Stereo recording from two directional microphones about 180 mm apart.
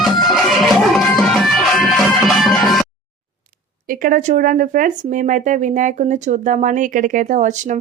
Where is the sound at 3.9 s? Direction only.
50° right (ahead or behind).